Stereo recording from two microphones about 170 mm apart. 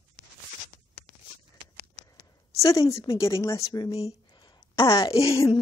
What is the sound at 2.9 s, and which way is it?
Speech, 20° left (ahead or behind).